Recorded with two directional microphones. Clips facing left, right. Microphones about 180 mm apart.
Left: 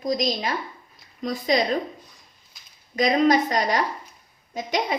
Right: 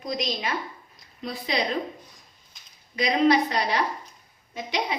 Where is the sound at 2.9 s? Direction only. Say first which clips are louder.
Left 2 dB; 45° left (ahead or behind).